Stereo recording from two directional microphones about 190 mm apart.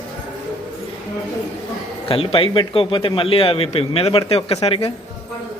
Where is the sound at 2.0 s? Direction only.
30° left (ahead or behind).